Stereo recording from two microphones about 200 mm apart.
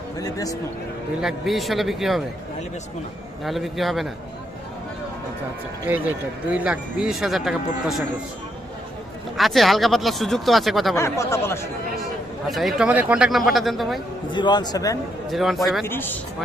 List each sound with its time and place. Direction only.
0.2 s speech: 15° left (ahead or behind)
1.2 s speech: centre (ahead or behind)
3.4 s speech: centre (ahead or behind)
5.9 s speech: 10° right (ahead or behind)
9.4 s speech: centre (ahead or behind)
10.9 s speech: 15° left (ahead or behind)
12.5 s speech: centre (ahead or behind)
14.3 s a man's voice: 20° left (ahead or behind)
15.3 s speech: centre (ahead or behind)
15.9 s speech: 10° left (ahead or behind)